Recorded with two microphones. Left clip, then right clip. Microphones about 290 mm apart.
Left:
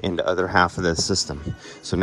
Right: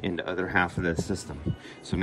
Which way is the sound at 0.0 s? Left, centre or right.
Centre.